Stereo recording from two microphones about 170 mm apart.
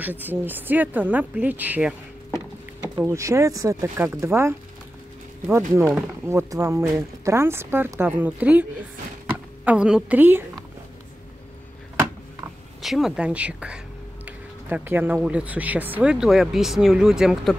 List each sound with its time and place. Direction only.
0.0 s speech: 10° right (ahead or behind)
3.0 s speech: 15° right (ahead or behind)
5.8 s speech: 10° right (ahead or behind)
9.7 s speech: 5° right (ahead or behind)
12.8 s speech: centre (ahead or behind)